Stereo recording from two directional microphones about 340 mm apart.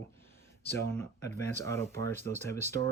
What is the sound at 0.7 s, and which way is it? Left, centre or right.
Speech, centre.